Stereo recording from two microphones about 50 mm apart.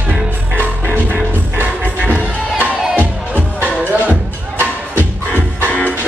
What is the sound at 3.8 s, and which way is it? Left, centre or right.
Music, right.